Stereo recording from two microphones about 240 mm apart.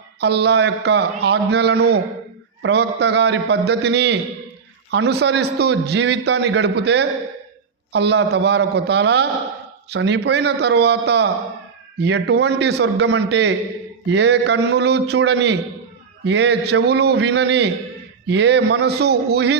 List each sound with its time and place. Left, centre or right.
0.2 s a man's voice: right